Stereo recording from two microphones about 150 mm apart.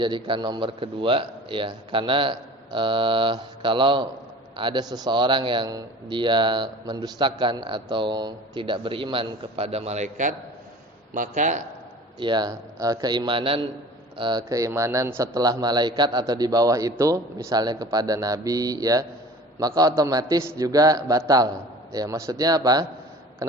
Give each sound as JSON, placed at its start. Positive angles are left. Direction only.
{"t": 0.0, "sound": "a man's voice", "side_deg": -30}
{"t": 12.2, "sound": "a man's voice", "side_deg": -30}
{"t": 15.4, "sound": "a man's voice", "side_deg": -25}